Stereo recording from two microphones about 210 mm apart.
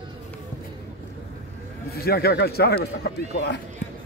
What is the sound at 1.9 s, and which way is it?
Speech, 45° left (ahead or behind).